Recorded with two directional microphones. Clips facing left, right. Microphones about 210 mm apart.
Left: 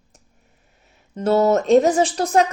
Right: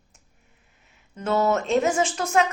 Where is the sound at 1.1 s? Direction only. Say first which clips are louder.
Left 6 dB; 35° left (ahead or behind).